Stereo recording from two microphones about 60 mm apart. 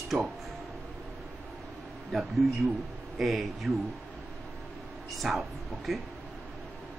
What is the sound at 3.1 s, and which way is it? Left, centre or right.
Speech, centre.